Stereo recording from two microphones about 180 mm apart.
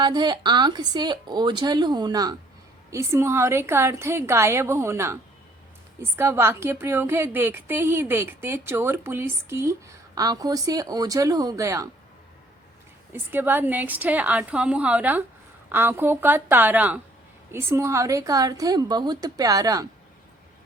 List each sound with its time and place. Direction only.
0.0 s a woman's voice: 25° right (ahead or behind)
13.3 s a woman's voice: 10° right (ahead or behind)